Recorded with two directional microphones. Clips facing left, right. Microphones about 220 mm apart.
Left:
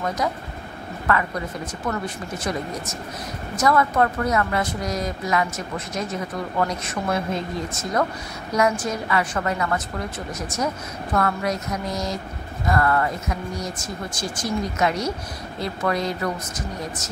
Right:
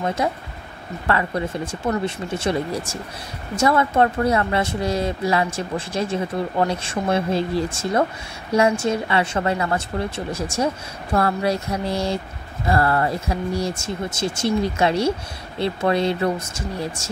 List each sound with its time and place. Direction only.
0.0 s speech: 25° right (ahead or behind)